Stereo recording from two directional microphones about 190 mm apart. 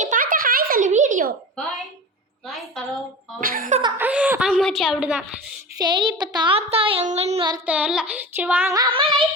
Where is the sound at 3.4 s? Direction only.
45° right (ahead or behind).